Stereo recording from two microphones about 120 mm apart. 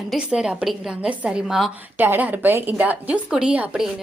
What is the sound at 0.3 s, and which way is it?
A woman's voice, 5° right (ahead or behind).